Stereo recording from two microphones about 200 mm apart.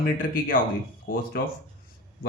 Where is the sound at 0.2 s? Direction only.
45° left (ahead or behind).